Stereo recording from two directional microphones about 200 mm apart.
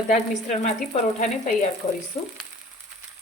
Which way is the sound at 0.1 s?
35° left (ahead or behind).